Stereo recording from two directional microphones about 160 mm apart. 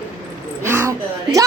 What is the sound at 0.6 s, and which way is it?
Speech, 15° right (ahead or behind).